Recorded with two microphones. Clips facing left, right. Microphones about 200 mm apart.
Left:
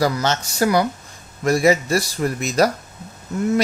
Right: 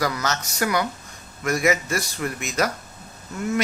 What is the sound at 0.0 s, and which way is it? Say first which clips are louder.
Speech: left 5 dB; 30° left (ahead or behind).